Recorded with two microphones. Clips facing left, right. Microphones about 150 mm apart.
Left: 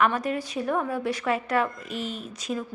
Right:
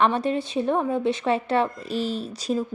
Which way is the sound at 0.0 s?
30° right (ahead or behind).